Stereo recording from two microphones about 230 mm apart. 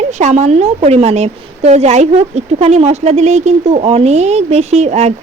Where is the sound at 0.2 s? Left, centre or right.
Right.